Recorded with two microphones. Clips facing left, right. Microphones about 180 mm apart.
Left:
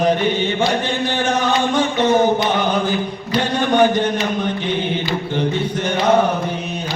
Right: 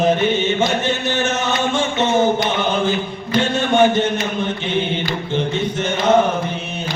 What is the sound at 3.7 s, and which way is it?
Speech, 25° right (ahead or behind).